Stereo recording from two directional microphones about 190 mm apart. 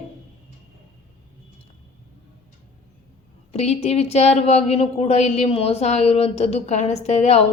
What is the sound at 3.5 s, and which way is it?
A woman's voice, 35° left (ahead or behind).